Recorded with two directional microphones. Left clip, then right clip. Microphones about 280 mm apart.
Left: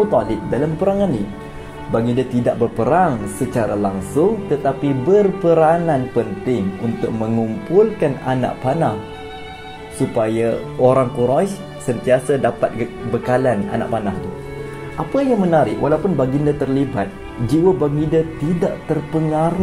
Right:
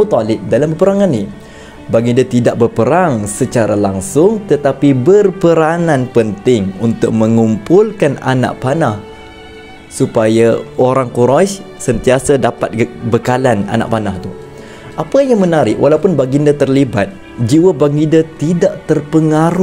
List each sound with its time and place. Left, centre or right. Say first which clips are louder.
0.1 s speech: right 6 dB; right
10.1 s speech: right 8 dB; right
15.1 s speech: right 5 dB; right